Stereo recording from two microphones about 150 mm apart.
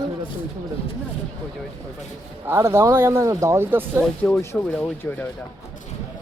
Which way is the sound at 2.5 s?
15° right (ahead or behind).